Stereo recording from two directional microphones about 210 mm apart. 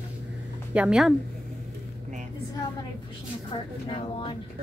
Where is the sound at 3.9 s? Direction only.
25° left (ahead or behind).